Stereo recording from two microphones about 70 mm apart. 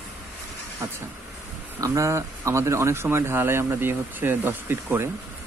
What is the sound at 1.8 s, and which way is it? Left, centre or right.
Speech, right.